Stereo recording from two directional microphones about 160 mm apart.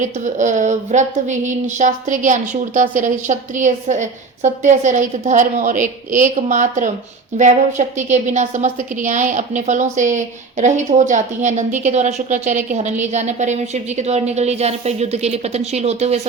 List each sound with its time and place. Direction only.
0.0 s a woman's voice: 50° right (ahead or behind)